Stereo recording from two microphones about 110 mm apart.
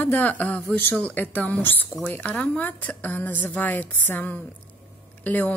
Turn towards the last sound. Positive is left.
turn(degrees=15)  # may be behind; listen again after turning